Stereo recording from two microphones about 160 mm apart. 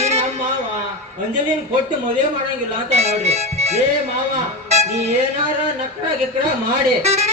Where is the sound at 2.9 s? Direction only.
40° right (ahead or behind).